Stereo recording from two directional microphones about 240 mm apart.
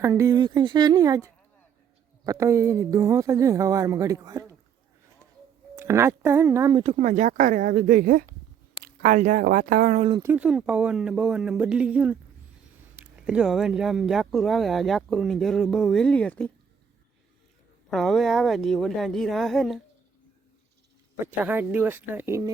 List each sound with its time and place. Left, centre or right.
0.0 s speech: centre
5.7 s speech: centre
6.9 s speech: right
10.2 s speech: centre
17.9 s speech: centre
21.2 s speech: centre